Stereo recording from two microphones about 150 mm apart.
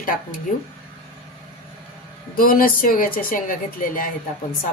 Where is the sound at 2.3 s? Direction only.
75° left (ahead or behind).